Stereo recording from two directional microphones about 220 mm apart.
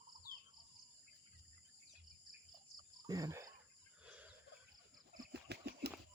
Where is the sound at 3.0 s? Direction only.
15° right (ahead or behind).